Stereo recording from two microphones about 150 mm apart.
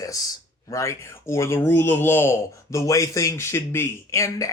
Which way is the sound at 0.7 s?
20° left (ahead or behind).